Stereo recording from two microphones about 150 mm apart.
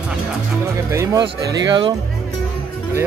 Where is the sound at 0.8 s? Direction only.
20° right (ahead or behind).